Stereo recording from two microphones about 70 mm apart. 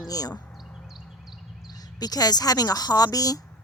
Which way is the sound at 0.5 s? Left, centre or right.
Centre.